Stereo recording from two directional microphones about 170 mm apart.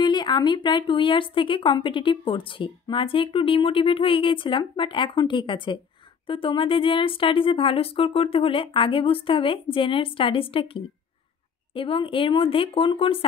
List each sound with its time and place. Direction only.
0.0 s speech: 25° left (ahead or behind)